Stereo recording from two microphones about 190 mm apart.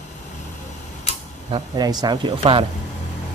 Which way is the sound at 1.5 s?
20° right (ahead or behind).